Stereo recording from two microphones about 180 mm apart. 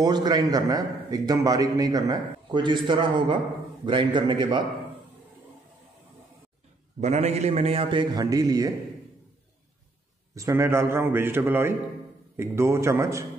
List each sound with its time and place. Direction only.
0.0 s a man's voice: 20° right (ahead or behind)
7.0 s a man's voice: 35° right (ahead or behind); by 8.7 s 20° right (ahead or behind)
10.3 s a man's voice: 15° right (ahead or behind)